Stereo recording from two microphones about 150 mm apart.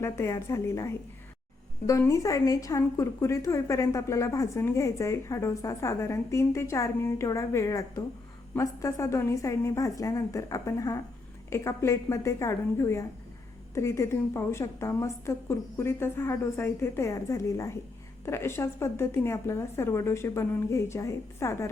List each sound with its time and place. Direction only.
0.0 s a woman's voice: 20° left (ahead or behind)